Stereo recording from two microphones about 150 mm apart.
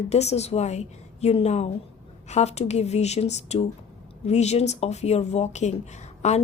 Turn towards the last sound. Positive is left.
turn(degrees=50)  # may be behind; listen again after turning